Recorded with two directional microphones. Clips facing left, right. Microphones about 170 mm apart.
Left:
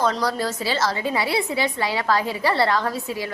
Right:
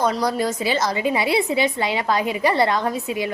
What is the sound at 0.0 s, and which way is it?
A woman's voice, 15° right (ahead or behind).